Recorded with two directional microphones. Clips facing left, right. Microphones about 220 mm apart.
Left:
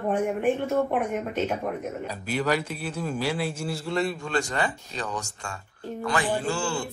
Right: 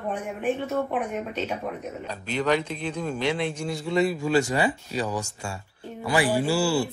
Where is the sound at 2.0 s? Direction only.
10° left (ahead or behind).